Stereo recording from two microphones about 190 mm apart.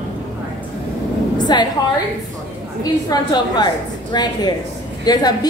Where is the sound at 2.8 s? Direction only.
20° left (ahead or behind).